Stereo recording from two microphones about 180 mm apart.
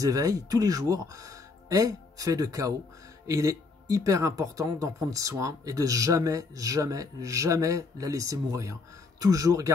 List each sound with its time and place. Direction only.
0.0 s speech: 20° right (ahead or behind)